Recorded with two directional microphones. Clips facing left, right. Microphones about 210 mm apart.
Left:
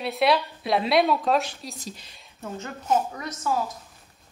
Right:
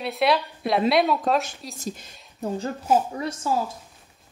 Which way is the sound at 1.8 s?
50° right (ahead or behind).